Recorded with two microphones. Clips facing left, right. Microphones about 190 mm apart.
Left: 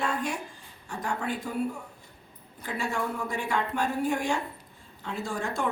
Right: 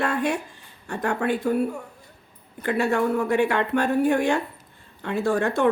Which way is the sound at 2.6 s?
65° right (ahead or behind).